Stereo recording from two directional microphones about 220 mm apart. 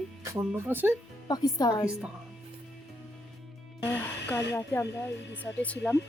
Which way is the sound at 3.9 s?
10° left (ahead or behind).